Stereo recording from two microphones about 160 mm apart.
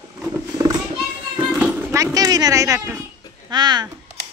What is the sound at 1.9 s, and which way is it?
Speech, 20° right (ahead or behind).